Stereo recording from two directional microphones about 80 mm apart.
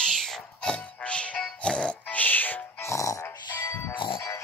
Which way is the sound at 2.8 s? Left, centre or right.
Left.